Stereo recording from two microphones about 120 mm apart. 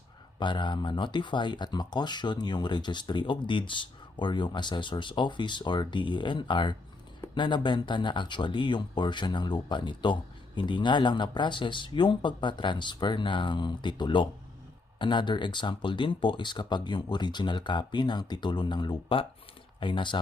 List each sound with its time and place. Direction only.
0.3 s speech: 40° left (ahead or behind)